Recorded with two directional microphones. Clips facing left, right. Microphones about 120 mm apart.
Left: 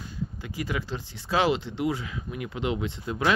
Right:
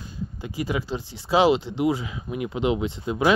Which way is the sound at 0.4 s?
20° right (ahead or behind).